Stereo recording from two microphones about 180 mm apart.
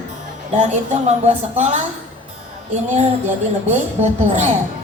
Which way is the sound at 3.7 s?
40° right (ahead or behind).